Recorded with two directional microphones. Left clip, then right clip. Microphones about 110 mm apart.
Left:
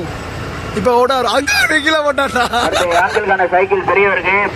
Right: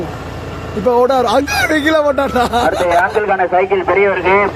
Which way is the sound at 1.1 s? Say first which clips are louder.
Right 1 dB; 10° right (ahead or behind).